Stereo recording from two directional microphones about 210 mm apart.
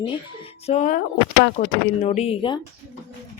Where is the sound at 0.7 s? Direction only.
35° left (ahead or behind).